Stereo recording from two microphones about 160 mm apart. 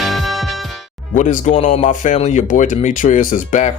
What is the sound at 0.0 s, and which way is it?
Music, centre (ahead or behind).